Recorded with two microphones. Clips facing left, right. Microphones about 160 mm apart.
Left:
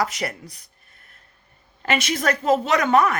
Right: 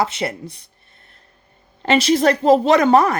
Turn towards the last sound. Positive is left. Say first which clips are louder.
# right 5 dB
turn(degrees=-35)  # may be behind; listen again after turning